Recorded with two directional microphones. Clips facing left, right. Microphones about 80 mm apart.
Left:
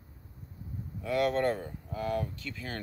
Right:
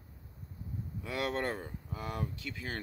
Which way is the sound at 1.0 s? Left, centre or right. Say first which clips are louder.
Left 7 dB; centre.